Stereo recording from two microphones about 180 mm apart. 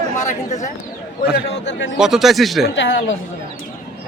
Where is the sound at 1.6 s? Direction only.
80° left.